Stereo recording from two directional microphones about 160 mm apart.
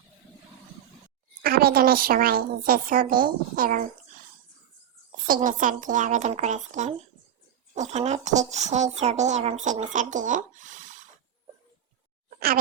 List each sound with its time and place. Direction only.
1.4 s a woman's voice: 75° right (ahead or behind); by 3.8 s 60° right (ahead or behind)
5.1 s a woman's voice: 60° right (ahead or behind)